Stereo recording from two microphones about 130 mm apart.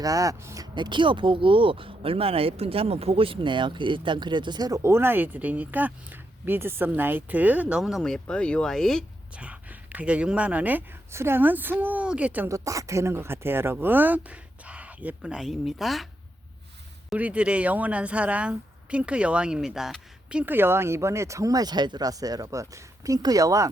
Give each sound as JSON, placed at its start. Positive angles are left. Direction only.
{"t": 0.0, "sound": "speech", "side_deg": -25}
{"t": 9.3, "sound": "speech", "side_deg": -10}
{"t": 12.5, "sound": "speech", "side_deg": -25}
{"t": 17.2, "sound": "speech", "side_deg": -10}
{"t": 20.4, "sound": "speech", "side_deg": -15}